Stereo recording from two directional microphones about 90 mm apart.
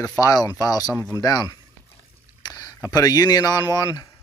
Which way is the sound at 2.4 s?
45° left (ahead or behind).